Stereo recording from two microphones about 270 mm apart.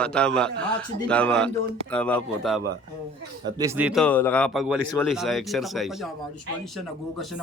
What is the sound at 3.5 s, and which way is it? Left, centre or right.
A man's voice, centre.